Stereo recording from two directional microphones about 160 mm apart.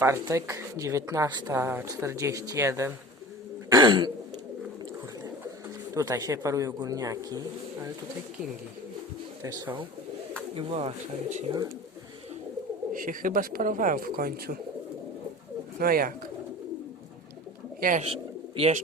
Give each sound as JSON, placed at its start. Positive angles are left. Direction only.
{"t": 0.0, "sound": "speech", "side_deg": -20}
{"t": 1.5, "sound": "speech", "side_deg": -15}
{"t": 3.7, "sound": "throat clearing", "side_deg": -25}
{"t": 5.9, "sound": "speech", "side_deg": -20}
{"t": 9.4, "sound": "speech", "side_deg": -20}
{"t": 10.5, "sound": "speech", "side_deg": -35}
{"t": 12.9, "sound": "speech", "side_deg": -60}
{"t": 15.8, "sound": "speech", "side_deg": -65}
{"t": 17.7, "sound": "speech", "side_deg": -60}
{"t": 18.0, "sound": "bird", "side_deg": -35}